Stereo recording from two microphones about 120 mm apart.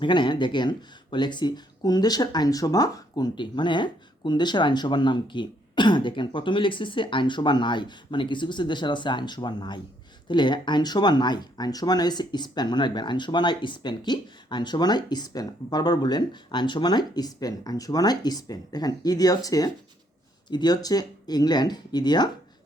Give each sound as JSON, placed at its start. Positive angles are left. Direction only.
{"t": 0.0, "sound": "speech", "side_deg": 40}